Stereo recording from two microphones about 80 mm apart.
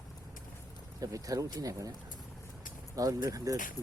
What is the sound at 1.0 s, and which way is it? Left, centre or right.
Speech, right.